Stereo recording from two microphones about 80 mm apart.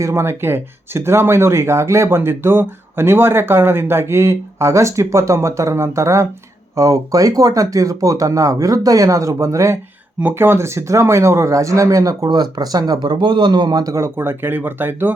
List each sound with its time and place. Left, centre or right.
0.0 s speech: right
13.9 s speech: right